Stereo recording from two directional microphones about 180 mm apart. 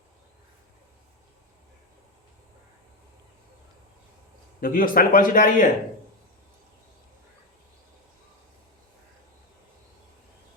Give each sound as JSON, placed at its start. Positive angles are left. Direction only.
{"t": 4.6, "sound": "a man's voice", "side_deg": 55}